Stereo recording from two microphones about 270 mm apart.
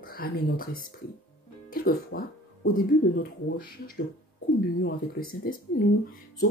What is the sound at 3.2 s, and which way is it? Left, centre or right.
A woman's voice, left.